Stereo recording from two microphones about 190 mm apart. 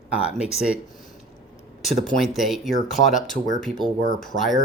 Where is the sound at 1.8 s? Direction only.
Centre (ahead or behind).